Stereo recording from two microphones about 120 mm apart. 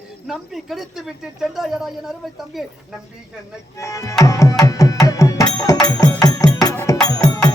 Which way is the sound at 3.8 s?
25° left (ahead or behind).